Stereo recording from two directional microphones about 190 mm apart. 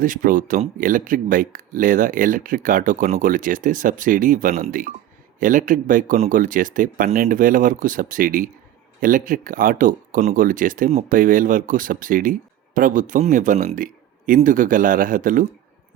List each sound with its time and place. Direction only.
0.0 s speech: 45° right (ahead or behind)